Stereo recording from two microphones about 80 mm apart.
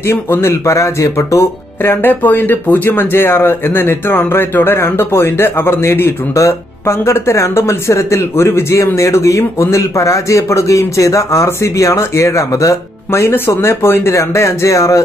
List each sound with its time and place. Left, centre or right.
0.0 s speech: left